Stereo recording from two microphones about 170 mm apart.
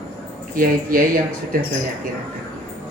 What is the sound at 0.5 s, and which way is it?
Speech, 55° right (ahead or behind).